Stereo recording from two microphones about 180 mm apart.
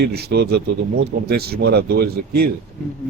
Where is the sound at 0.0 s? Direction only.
65° right (ahead or behind).